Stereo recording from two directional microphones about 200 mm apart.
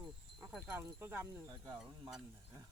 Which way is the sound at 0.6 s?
10° right (ahead or behind).